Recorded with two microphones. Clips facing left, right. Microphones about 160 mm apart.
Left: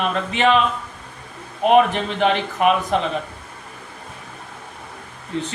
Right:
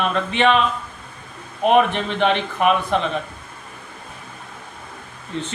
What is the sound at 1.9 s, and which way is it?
Speech, 40° left (ahead or behind).